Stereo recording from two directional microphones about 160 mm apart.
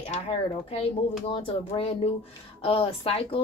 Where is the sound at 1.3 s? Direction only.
35° left (ahead or behind).